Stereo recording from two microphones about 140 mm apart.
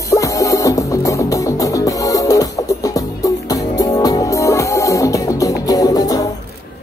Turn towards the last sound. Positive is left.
turn(degrees=25)  # may be behind; listen again after turning